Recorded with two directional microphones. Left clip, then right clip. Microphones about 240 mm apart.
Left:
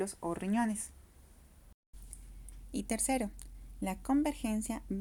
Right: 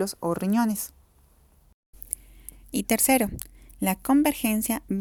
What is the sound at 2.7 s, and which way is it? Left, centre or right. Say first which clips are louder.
A woman's voice: right 12 dB; right.